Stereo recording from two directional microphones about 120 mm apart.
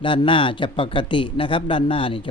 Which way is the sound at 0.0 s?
45° left (ahead or behind).